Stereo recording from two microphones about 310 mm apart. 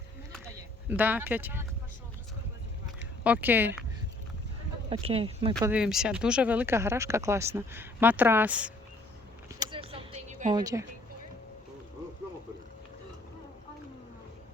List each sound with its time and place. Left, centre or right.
0.4 s speech: centre
3.2 s speech: centre
4.9 s speech: centre
9.6 s a sound: centre
10.6 s speech: centre